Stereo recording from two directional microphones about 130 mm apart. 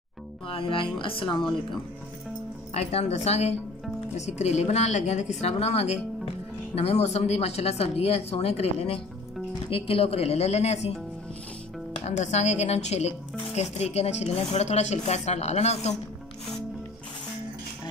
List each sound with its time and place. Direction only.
0.5 s speech: 40° left (ahead or behind)
2.7 s a woman's voice: 50° left (ahead or behind)
12.0 s speech: 60° left (ahead or behind)